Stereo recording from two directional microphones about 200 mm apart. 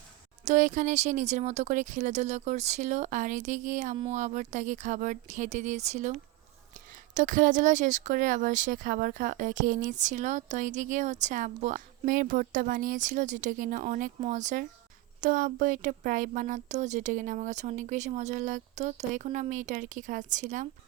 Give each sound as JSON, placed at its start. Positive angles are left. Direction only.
{"t": 0.4, "sound": "speech", "side_deg": -40}